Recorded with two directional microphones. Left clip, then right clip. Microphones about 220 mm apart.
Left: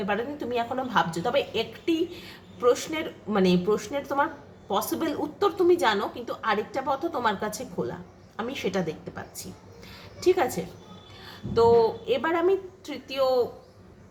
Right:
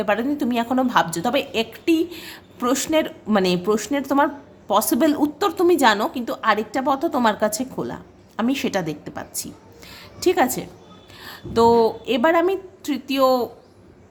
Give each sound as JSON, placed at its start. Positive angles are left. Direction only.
{"t": 0.0, "sound": "a woman's voice", "side_deg": -55}